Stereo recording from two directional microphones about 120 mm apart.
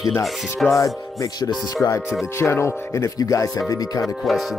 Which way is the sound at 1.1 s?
30° left (ahead or behind).